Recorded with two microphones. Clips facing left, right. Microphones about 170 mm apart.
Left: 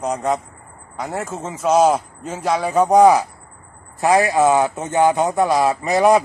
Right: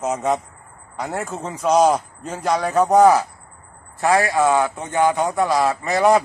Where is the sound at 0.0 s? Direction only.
Centre (ahead or behind).